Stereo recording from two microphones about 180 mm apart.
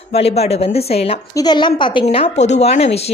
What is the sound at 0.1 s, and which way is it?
Speech, 35° left (ahead or behind).